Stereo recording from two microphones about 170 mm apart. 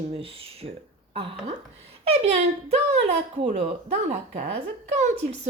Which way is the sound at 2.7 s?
45° right (ahead or behind).